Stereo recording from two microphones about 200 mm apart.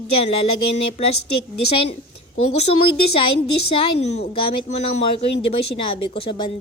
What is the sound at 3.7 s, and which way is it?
A woman's voice, 30° left (ahead or behind).